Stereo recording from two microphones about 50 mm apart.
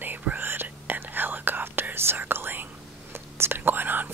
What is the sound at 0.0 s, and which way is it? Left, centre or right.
Whispering, right.